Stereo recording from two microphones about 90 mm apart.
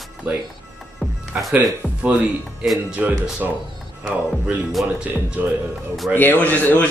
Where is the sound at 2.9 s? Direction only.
20° right (ahead or behind).